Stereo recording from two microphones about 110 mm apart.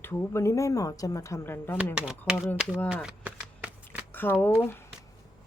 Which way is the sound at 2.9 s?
10° right (ahead or behind).